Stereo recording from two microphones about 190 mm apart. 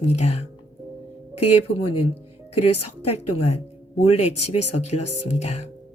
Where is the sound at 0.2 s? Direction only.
35° left (ahead or behind).